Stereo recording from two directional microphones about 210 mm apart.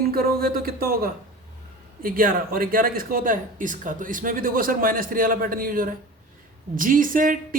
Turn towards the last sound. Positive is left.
turn(degrees=-40)  # may be behind; listen again after turning